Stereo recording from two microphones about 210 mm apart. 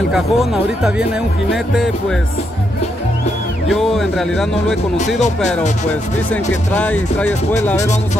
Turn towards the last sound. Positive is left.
turn(degrees=5)  # may be behind; listen again after turning